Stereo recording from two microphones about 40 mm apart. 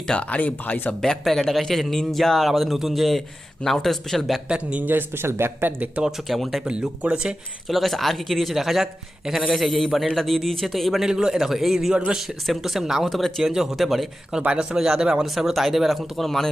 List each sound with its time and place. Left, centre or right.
0.2 s speech: left
1.2 s a man's voice: centre
4.4 s a man's voice: right
4.8 s speech: right
6.2 s a man's voice: centre
6.7 s a man's voice: right
7.7 s a man's voice: centre
9.5 s a man's voice: centre
11.0 s a man's voice: centre
13.4 s a man's voice: centre
13.7 s a man's voice: centre
14.4 s a man's voice: right
15.2 s a man's voice: centre